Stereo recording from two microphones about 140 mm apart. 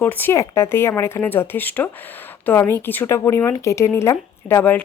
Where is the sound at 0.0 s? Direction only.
15° left (ahead or behind).